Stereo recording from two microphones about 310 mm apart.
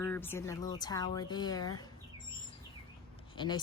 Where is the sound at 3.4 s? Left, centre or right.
Centre.